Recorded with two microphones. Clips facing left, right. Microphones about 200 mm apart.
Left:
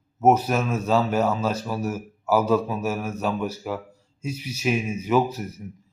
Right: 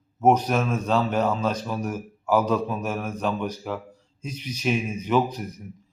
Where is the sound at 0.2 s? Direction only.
5° left (ahead or behind).